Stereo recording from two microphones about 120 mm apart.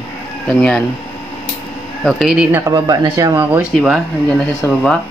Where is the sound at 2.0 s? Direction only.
Centre (ahead or behind).